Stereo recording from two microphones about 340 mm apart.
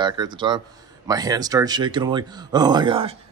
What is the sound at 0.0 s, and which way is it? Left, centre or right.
Speech, centre.